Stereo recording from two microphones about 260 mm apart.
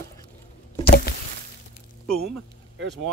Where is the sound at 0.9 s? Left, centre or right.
Left.